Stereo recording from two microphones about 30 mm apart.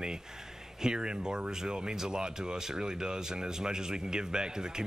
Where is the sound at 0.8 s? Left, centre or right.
Right.